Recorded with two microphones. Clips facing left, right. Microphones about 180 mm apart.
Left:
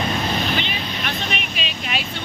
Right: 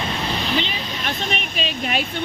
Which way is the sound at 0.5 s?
35° right (ahead or behind).